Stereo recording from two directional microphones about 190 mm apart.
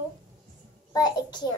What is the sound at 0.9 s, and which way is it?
Speech, 20° left (ahead or behind).